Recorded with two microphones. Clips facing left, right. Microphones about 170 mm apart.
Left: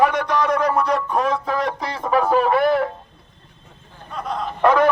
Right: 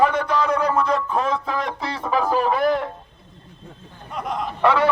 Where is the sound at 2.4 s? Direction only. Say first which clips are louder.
Left 3 dB; 5° left (ahead or behind).